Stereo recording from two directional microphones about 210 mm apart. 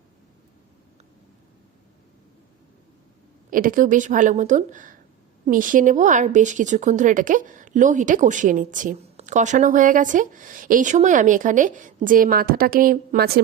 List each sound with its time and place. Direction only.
3.5 s a woman's voice: 40° right (ahead or behind)